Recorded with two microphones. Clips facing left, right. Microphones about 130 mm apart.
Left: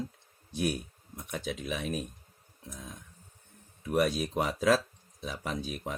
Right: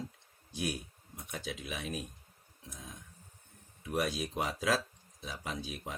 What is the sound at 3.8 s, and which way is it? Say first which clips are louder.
Speech: left 6 dB; 50° left (ahead or behind).